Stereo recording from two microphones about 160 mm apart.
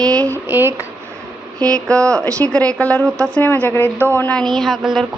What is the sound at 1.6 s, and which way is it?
A woman's voice, 5° left (ahead or behind).